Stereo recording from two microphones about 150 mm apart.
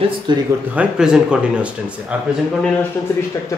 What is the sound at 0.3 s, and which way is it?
Speech, 30° right (ahead or behind).